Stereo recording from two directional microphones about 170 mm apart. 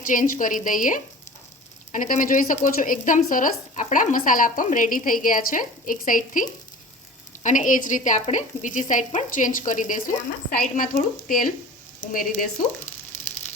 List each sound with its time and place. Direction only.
0.0 s speech: 50° left (ahead or behind)